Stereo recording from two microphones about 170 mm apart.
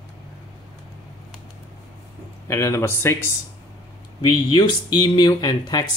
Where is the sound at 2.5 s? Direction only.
15° left (ahead or behind).